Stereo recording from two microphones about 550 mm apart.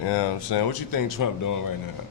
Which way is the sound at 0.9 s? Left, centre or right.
Left.